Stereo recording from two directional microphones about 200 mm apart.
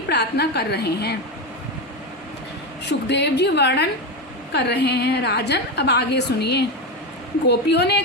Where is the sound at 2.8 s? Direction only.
60° left (ahead or behind).